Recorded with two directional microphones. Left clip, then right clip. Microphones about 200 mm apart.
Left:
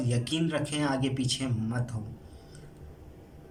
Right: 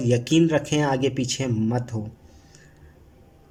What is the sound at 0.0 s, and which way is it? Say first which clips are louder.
Speech: right 11 dB; 40° right (ahead or behind).